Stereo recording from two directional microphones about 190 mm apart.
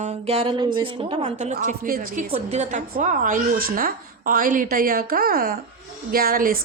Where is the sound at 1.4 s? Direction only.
40° right (ahead or behind).